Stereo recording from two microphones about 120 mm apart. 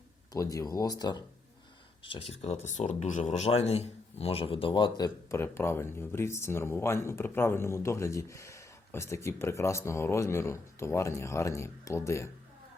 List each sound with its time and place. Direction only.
0.3 s speech: 30° left (ahead or behind)
2.0 s speech: 55° left (ahead or behind); by 5.4 s 35° left (ahead or behind)
5.4 s speech: 20° left (ahead or behind)